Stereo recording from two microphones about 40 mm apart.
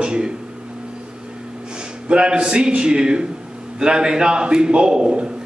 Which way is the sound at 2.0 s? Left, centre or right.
Right.